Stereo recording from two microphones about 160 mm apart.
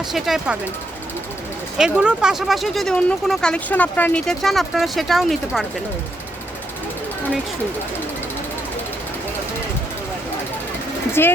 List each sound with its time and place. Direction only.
0.1 s speech: 5° right (ahead or behind)
1.8 s speech: 5° right (ahead or behind)
11.2 s speech: 15° left (ahead or behind)